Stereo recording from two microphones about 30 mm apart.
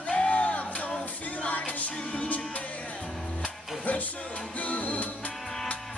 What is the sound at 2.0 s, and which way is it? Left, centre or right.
Music, left.